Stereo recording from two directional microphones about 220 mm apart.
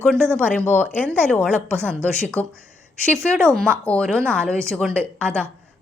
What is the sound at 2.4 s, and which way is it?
Speech, 30° left (ahead or behind).